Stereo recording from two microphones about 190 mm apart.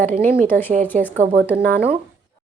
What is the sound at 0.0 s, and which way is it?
Speech, 45° right (ahead or behind).